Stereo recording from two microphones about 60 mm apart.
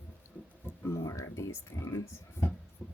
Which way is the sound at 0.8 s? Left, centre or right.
Left.